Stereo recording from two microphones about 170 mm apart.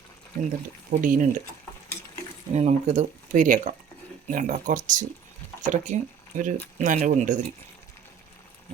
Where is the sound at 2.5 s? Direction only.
40° right (ahead or behind).